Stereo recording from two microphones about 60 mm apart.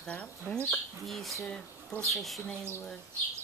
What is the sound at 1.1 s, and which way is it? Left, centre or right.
Speech, centre.